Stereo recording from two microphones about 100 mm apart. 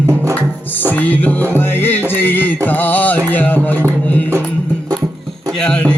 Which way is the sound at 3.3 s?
15° left (ahead or behind).